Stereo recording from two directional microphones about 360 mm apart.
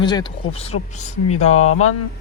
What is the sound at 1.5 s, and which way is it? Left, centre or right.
Speech, left.